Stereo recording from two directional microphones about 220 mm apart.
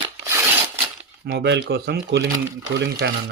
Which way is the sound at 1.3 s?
50° right (ahead or behind).